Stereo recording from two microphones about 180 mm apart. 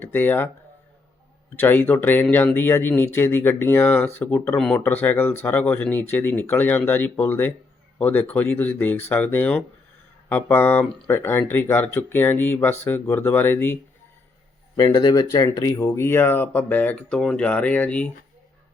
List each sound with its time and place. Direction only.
0.0 s speech: 10° left (ahead or behind)
1.5 s speech: 10° left (ahead or behind)
14.8 s speech: 20° left (ahead or behind)